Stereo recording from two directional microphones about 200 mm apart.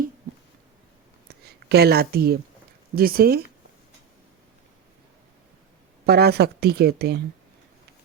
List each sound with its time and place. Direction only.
1.5 s speech: 50° right (ahead or behind)
6.1 s speech: 50° right (ahead or behind)